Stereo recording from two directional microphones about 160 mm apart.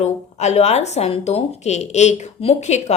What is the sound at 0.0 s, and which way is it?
A woman's voice, 45° left (ahead or behind).